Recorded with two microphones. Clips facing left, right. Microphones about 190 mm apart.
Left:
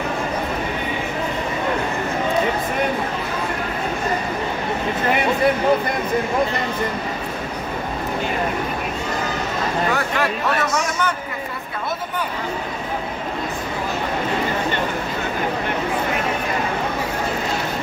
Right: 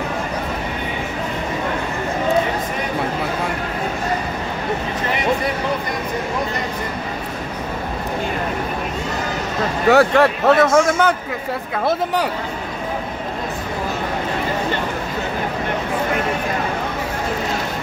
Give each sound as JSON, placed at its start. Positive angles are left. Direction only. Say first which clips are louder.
{"t": 9.8, "sound": "speech", "louder": "right 9 dB", "side_deg": -70}